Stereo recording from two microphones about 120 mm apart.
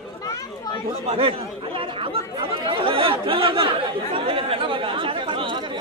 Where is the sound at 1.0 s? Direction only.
50° right (ahead or behind).